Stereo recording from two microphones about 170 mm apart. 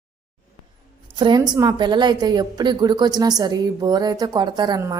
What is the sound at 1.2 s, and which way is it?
A woman's voice, 25° right (ahead or behind).